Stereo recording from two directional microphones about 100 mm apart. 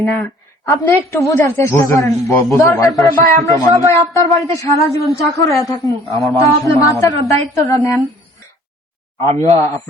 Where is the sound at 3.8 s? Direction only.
30° left (ahead or behind).